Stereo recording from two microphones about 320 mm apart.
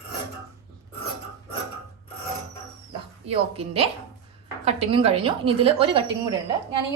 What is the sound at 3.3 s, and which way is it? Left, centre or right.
A woman's voice, centre.